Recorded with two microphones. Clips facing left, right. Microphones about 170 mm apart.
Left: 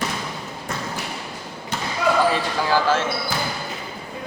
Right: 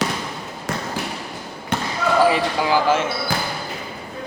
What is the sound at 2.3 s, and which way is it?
Speech, 15° right (ahead or behind).